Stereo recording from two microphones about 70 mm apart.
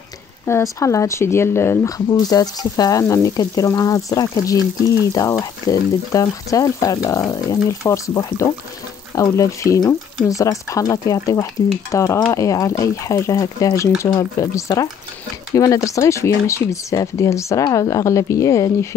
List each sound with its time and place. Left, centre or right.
0.5 s speech: left
2.0 s speech: left
11.9 s speech: left
12.3 s speech: left